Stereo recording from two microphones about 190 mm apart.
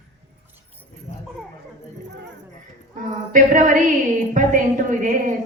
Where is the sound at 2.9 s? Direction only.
40° right (ahead or behind).